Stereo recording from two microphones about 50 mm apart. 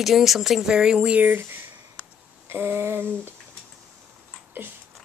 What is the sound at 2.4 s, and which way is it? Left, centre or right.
Speech, right.